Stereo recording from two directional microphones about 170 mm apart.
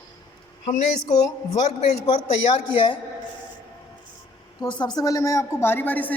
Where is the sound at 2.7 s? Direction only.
30° left (ahead or behind).